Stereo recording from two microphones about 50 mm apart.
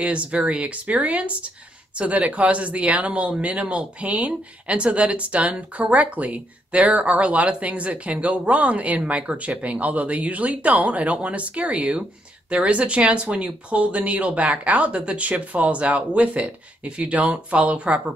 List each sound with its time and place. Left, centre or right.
0.0 s speech: right